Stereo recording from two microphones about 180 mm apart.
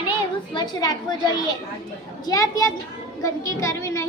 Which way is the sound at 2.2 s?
20° left (ahead or behind).